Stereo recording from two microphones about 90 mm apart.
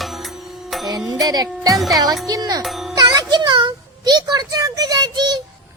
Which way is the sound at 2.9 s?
50° right (ahead or behind).